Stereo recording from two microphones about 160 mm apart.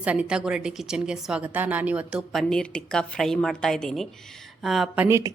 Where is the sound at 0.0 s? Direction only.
10° right (ahead or behind).